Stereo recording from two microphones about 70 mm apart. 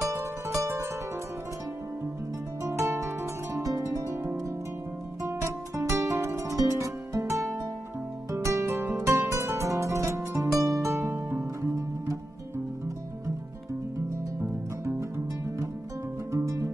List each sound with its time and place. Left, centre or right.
0.6 s music: right
3.6 s harp: right
5.2 s music: right
10.6 s music: right
14.4 s music: right